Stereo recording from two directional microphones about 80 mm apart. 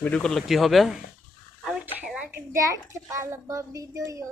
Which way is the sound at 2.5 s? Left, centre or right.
Right.